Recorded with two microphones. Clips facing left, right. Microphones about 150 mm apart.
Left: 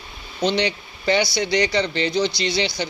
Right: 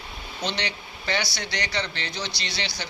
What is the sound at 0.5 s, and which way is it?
Speech, 15° left (ahead or behind).